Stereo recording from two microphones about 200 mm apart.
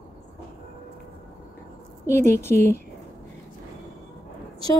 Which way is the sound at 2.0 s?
10° left (ahead or behind).